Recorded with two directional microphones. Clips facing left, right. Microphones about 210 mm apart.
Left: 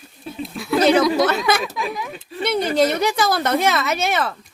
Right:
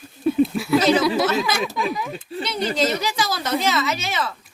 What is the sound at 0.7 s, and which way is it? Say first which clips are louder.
Speech: left 2 dB; 60° left (ahead or behind).